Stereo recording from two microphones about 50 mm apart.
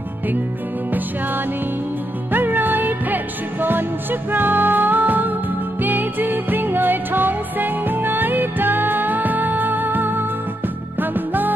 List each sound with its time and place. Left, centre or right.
2.3 s music: right